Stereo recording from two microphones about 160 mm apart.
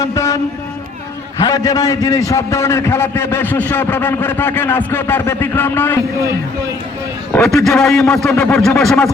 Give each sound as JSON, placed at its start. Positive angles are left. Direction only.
{"t": 0.0, "sound": "speech", "side_deg": 20}
{"t": 1.4, "sound": "a man's voice", "side_deg": 25}
{"t": 7.3, "sound": "speech", "side_deg": 5}